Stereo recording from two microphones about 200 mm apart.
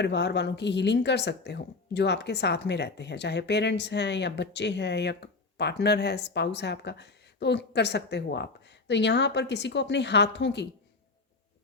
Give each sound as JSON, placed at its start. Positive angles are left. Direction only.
{"t": 0.0, "sound": "speech", "side_deg": 60}